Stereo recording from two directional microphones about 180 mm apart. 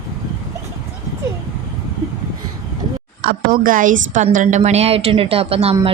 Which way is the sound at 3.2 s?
50° right (ahead or behind).